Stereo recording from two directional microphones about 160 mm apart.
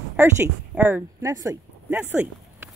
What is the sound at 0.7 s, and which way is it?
Speech, 10° right (ahead or behind).